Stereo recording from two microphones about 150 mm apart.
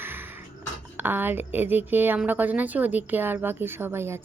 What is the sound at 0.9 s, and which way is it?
A woman's voice, 15° right (ahead or behind).